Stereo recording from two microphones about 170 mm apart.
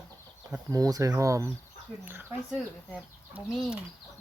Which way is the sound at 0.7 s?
20° right (ahead or behind).